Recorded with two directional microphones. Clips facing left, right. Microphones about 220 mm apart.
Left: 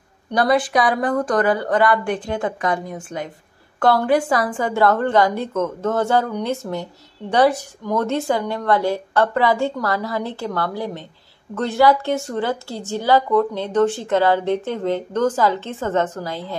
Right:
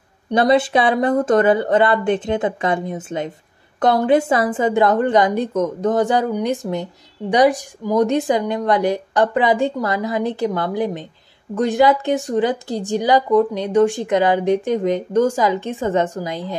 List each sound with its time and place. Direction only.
0.3 s a woman's voice: 25° right (ahead or behind)